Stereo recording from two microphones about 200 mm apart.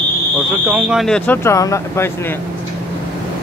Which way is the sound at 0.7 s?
5° right (ahead or behind).